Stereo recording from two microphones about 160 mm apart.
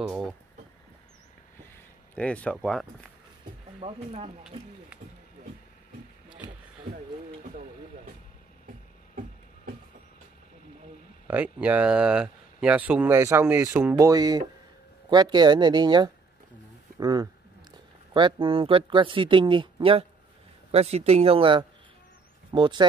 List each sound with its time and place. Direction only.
0.0 s speech: centre (ahead or behind)
2.1 s speech: 10° left (ahead or behind)
3.8 s speech: 40° right (ahead or behind)
11.2 s speech: 10° right (ahead or behind); by 22.8 s 30° right (ahead or behind)